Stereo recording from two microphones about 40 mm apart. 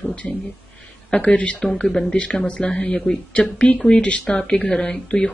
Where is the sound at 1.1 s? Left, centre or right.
Left.